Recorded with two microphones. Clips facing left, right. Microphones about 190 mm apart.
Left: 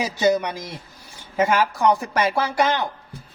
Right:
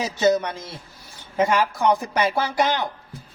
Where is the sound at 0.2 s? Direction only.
15° left (ahead or behind).